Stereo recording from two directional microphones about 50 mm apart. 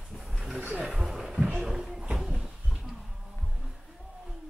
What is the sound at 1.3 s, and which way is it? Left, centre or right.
Music, right.